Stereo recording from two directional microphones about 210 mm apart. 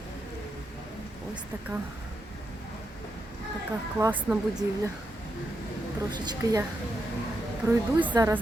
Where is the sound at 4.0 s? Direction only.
10° right (ahead or behind).